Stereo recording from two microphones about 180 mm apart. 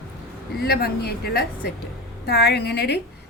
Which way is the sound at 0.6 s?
60° left (ahead or behind).